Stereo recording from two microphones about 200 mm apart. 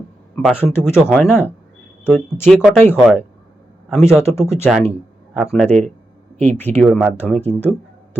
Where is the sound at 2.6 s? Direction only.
5° right (ahead or behind).